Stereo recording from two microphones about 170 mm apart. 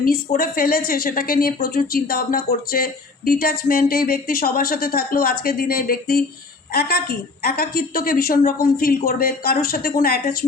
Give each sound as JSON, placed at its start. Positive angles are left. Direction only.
{"t": 0.0, "sound": "a woman's voice", "side_deg": 55}